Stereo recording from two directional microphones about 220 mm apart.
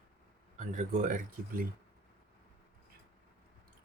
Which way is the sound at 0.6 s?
35° right (ahead or behind).